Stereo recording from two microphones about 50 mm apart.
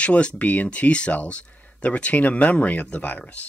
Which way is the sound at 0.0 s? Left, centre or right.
Left.